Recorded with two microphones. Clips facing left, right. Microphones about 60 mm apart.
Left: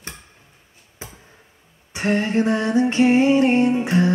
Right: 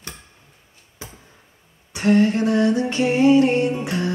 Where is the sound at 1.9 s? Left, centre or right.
Left.